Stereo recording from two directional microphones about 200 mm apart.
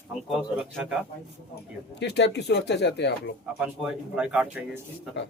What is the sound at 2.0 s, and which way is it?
Speech, 60° left (ahead or behind).